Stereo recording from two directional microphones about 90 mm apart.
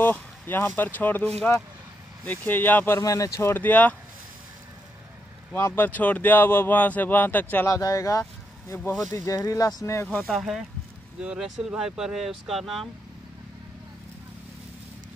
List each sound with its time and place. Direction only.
0.0 s speech: 20° left (ahead or behind)
3.0 s speech: 40° left (ahead or behind)
3.5 s speech: 20° left (ahead or behind)
5.5 s speech: 25° left (ahead or behind)
7.7 s speech: 35° left (ahead or behind)
10.2 s speech: centre (ahead or behind)